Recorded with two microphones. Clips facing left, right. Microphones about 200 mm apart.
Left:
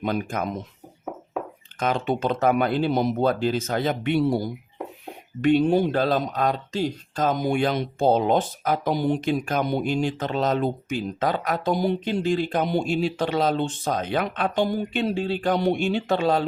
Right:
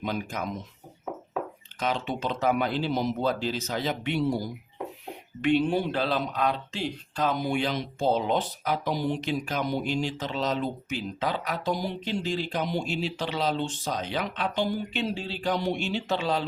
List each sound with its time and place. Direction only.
0.0 s speech: 55° left (ahead or behind)
1.8 s speech: 50° left (ahead or behind)
5.4 s speech: 45° left (ahead or behind)